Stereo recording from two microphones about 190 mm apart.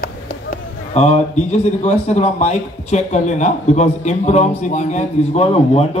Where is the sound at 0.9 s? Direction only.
35° left (ahead or behind).